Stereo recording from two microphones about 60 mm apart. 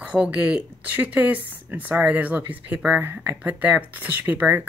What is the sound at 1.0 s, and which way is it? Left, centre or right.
Speech, right.